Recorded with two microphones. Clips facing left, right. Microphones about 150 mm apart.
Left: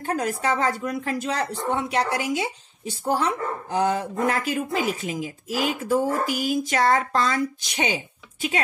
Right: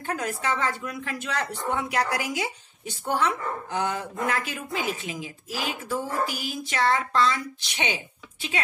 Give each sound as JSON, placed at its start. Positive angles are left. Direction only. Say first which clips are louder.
{"t": 0.0, "sound": "speech", "louder": "left 4 dB", "side_deg": 35}